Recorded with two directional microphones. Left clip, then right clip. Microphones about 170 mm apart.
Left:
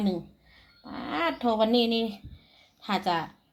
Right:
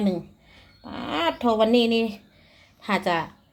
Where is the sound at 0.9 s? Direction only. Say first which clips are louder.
Right 4 dB; 20° right (ahead or behind).